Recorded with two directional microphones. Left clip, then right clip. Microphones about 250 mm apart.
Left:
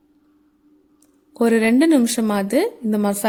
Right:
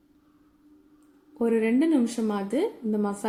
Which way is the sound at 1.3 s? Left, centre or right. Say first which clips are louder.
Left 7 dB; left.